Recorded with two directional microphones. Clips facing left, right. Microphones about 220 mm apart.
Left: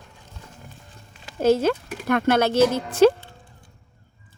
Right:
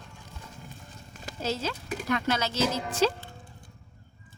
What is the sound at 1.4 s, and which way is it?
Speech, 55° left (ahead or behind).